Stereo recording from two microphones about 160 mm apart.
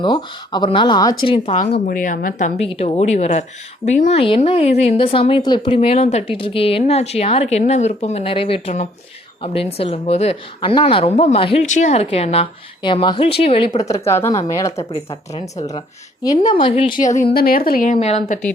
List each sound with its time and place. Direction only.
0.0 s speech: 30° left (ahead or behind)
1.7 s a woman's voice: 60° left (ahead or behind)
2.6 s a woman's voice: 40° left (ahead or behind)
11.6 s a woman's voice: 45° left (ahead or behind)
13.8 s speech: 20° left (ahead or behind)
14.8 s a woman's voice: 40° left (ahead or behind)
16.2 s speech: 25° left (ahead or behind)
17.0 s speech: 50° left (ahead or behind)
17.3 s a woman's voice: 65° left (ahead or behind)
18.0 s speech: 45° left (ahead or behind)